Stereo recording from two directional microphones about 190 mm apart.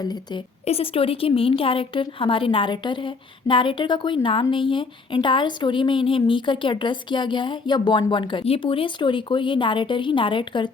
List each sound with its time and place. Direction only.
0.6 s a woman's voice: 30° left (ahead or behind)